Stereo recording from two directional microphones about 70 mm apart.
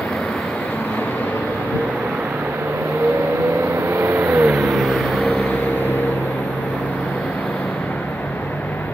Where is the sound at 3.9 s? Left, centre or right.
Right.